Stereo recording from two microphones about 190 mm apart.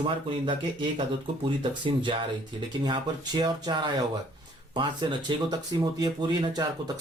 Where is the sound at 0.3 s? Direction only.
25° right (ahead or behind).